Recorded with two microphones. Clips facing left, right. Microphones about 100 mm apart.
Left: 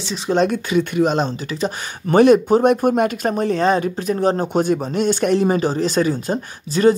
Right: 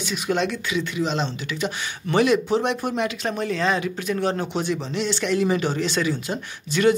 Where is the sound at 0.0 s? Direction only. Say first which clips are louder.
Left 5 dB; 30° left (ahead or behind).